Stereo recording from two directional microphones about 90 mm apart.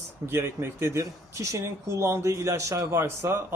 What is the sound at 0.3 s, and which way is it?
Speech, 25° right (ahead or behind).